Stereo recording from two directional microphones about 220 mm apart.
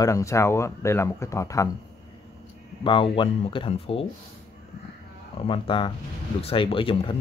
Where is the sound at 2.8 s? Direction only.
25° left (ahead or behind).